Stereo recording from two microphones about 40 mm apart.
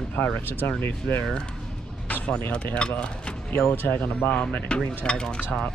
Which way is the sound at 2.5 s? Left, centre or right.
Left.